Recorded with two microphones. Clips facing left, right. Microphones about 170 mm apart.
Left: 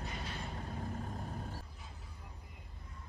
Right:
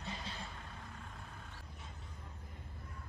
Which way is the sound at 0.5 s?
35° left (ahead or behind).